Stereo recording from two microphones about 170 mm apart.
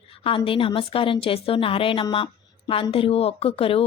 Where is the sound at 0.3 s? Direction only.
30° left (ahead or behind).